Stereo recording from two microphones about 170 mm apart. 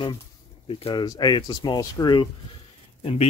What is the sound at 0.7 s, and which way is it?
Speech, 35° left (ahead or behind).